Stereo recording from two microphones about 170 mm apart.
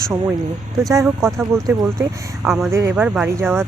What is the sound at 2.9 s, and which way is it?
Speech, 5° right (ahead or behind).